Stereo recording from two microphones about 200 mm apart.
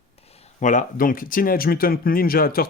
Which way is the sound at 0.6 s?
40° left (ahead or behind).